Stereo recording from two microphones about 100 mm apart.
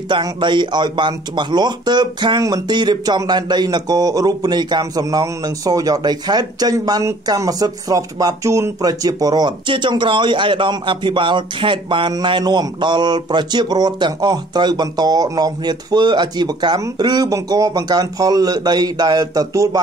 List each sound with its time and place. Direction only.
0.1 s speech: 50° right (ahead or behind)
12.1 s speech: 45° right (ahead or behind)